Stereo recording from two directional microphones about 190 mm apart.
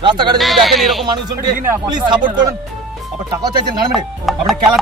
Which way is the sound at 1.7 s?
25° right (ahead or behind).